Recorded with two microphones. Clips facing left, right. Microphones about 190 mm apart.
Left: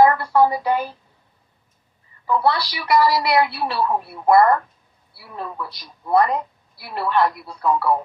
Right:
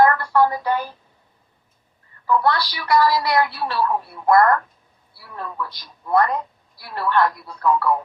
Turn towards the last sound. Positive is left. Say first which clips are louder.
# even
turn(degrees=15)  # may be behind; listen again after turning